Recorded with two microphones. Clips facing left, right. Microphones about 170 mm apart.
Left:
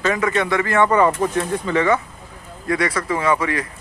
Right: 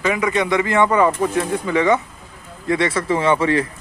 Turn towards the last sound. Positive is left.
turn(degrees=-30)  # may be behind; listen again after turning